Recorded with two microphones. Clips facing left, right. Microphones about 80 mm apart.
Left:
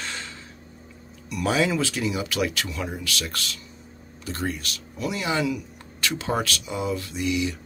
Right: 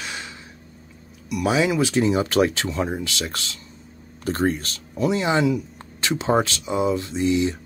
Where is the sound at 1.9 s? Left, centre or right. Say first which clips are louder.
Right 7 dB; right.